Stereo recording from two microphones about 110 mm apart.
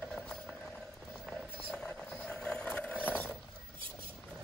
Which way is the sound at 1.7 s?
5° left (ahead or behind).